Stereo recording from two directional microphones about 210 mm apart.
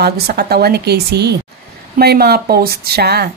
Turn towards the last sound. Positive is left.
turn(degrees=-50)  # may be behind; listen again after turning